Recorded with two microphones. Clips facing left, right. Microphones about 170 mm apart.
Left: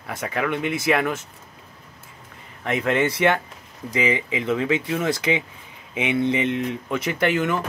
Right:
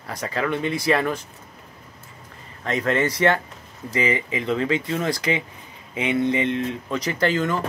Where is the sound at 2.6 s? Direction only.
15° left (ahead or behind).